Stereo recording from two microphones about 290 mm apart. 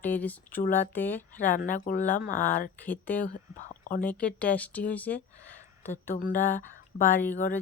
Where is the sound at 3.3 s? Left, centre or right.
Left.